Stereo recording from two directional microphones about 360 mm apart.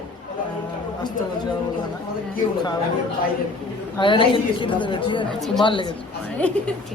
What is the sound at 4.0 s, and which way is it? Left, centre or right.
A woman's voice, centre.